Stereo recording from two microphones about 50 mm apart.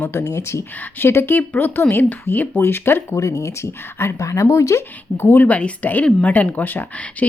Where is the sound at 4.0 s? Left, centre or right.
Left.